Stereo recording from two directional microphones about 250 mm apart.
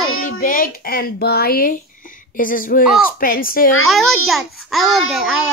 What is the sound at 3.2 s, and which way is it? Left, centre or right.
Speech, left.